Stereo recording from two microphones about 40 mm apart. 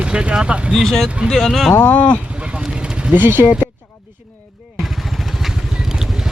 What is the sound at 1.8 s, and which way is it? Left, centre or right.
Speech, left.